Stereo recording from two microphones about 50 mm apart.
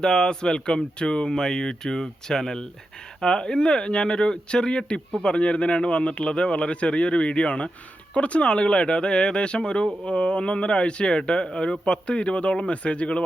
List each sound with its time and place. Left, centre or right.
0.0 s speech: centre